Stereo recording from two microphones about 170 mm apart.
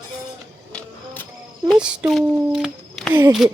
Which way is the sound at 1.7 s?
5° right (ahead or behind).